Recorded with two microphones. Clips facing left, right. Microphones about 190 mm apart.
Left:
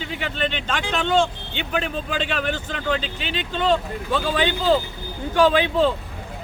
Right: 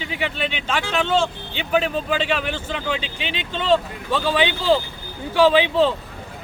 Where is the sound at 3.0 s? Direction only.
40° left (ahead or behind).